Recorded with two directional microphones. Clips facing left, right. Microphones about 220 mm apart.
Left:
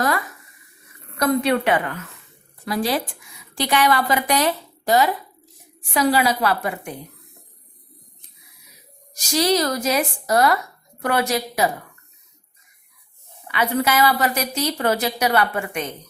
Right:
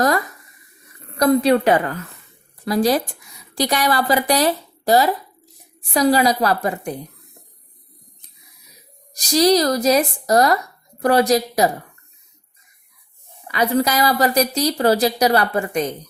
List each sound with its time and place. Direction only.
1.1 s a woman's voice: 35° right (ahead or behind)
9.1 s a woman's voice: 35° right (ahead or behind)
13.5 s a woman's voice: 40° right (ahead or behind)